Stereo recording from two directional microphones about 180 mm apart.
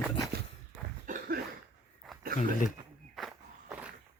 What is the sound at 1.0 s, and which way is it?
Cough, 50° right (ahead or behind).